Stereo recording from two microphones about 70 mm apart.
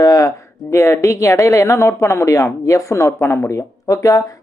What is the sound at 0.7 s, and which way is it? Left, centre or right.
Speech, left.